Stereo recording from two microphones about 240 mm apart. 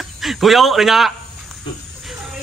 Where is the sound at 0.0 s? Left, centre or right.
Centre.